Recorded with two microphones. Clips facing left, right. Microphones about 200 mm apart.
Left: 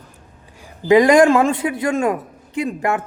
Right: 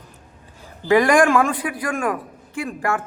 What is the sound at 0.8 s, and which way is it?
A man's voice, 20° left (ahead or behind).